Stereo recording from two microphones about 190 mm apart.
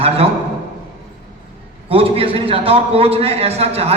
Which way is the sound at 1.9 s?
30° right (ahead or behind).